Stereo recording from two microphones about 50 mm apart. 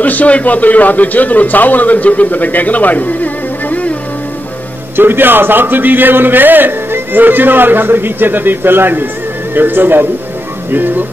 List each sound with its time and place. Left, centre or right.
0.0 s a man's voice: left
4.9 s a man's voice: right